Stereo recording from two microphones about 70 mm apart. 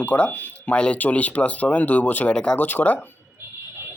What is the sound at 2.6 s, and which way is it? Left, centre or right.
Speech, left.